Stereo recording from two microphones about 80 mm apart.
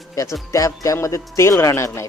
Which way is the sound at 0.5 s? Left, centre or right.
Left.